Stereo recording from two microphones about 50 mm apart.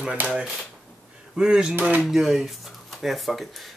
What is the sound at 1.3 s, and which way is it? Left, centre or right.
Speech, centre.